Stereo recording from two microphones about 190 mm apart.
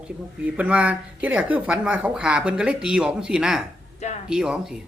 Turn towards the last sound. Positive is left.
turn(degrees=-5)  # may be behind; listen again after turning